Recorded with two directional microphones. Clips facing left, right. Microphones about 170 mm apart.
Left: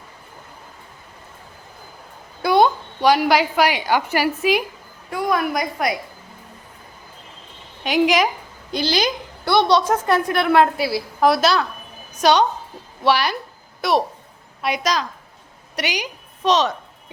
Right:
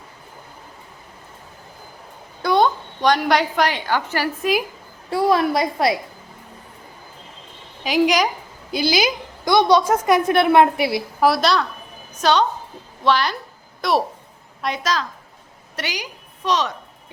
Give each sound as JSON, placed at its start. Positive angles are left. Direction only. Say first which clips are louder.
{"t": 2.4, "sound": "a woman's voice", "louder": "left 2 dB", "side_deg": 10}
{"t": 5.1, "sound": "a woman's voice", "louder": "right 4 dB", "side_deg": -30}
{"t": 7.9, "sound": "a woman's voice", "louder": "even", "side_deg": 0}
{"t": 11.2, "sound": "a woman's voice", "louder": "left 1 dB", "side_deg": 0}
{"t": 12.1, "sound": "a woman's voice", "louder": "left 2 dB", "side_deg": 15}